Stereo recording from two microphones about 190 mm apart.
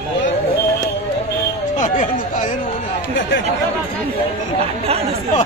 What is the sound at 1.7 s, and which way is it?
Chatter, 40° left (ahead or behind).